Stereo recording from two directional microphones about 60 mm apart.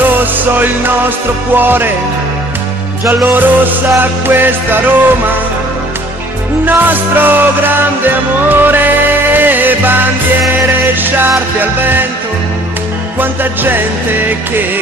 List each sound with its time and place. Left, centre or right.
0.2 s music: right
3.3 s music: right
6.6 s music: right
13.2 s music: right